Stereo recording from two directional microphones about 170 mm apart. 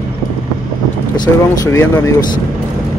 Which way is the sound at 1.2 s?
15° left (ahead or behind).